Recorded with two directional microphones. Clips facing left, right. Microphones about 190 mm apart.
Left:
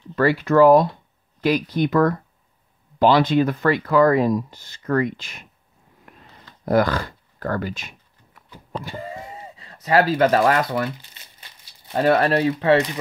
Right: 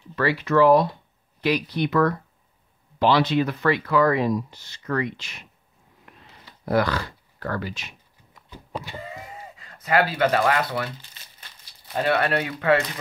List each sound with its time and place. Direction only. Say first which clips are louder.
0.1 s speech: left 4 dB; 45° left (ahead or behind)
6.6 s speech: left 3 dB; 45° left (ahead or behind)
12.0 s speech: left 5 dB; 40° left (ahead or behind)